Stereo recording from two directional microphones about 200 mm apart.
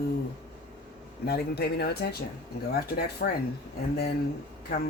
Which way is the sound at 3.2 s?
50° left (ahead or behind).